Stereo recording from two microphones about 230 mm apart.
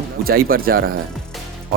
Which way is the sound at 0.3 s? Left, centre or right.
Right.